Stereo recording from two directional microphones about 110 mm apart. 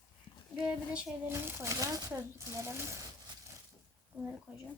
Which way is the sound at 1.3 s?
20° right (ahead or behind).